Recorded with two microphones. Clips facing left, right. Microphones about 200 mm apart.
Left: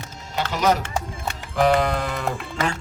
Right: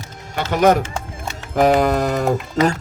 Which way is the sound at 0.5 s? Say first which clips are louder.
Right 7 dB; 55° right (ahead or behind).